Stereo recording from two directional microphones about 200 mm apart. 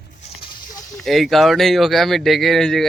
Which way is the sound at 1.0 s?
Centre (ahead or behind).